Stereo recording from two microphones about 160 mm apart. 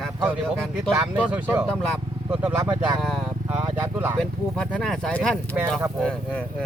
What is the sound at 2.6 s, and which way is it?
Speech, 25° right (ahead or behind).